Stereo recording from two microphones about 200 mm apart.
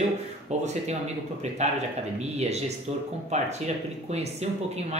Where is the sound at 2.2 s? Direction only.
35° right (ahead or behind).